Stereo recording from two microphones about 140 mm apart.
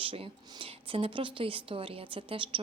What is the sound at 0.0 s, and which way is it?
Speech, 40° right (ahead or behind).